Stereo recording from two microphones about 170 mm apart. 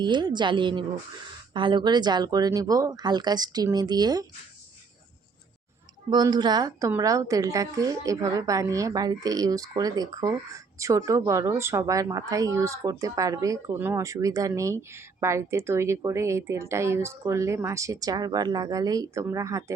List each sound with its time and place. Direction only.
0.0 s speech: 25° right (ahead or behind)
6.1 s speech: 25° right (ahead or behind)